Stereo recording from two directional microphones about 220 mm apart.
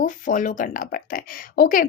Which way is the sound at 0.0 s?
35° left (ahead or behind).